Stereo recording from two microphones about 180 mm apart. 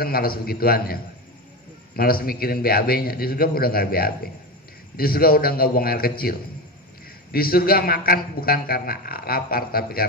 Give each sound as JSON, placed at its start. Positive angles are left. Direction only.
{"t": 0.0, "sound": "a man's voice", "side_deg": 55}
{"t": 7.3, "sound": "a man's voice", "side_deg": 55}